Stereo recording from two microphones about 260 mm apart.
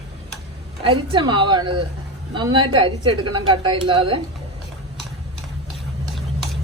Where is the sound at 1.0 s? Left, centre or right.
Centre.